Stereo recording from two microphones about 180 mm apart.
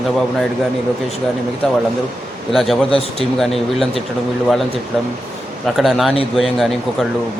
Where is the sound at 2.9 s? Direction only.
35° left (ahead or behind).